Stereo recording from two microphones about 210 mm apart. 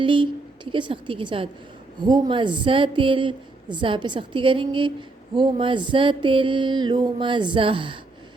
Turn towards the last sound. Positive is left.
turn(degrees=-25)  # may be behind; listen again after turning